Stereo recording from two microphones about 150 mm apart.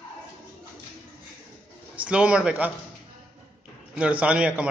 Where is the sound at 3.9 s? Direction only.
10° right (ahead or behind).